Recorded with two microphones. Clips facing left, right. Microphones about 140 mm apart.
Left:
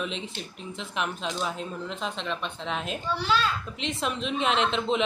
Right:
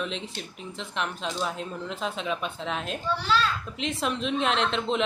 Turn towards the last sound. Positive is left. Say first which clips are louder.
# left 1 dB
turn(degrees=0)  # may be behind; listen again after turning